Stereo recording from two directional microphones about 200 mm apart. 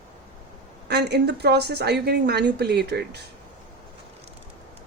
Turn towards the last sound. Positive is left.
turn(degrees=-55)  # may be behind; listen again after turning